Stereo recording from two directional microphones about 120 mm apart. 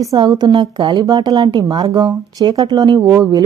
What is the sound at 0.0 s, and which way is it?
A woman's voice, 30° right (ahead or behind).